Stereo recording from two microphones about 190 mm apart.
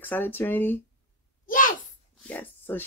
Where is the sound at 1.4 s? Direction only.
45° left (ahead or behind).